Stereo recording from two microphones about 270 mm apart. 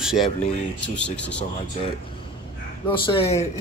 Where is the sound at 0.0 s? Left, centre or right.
Centre.